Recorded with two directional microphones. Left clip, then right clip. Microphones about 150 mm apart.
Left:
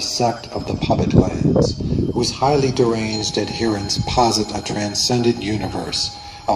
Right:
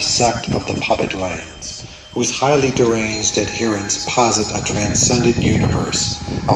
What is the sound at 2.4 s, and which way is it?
Speech, 30° left (ahead or behind).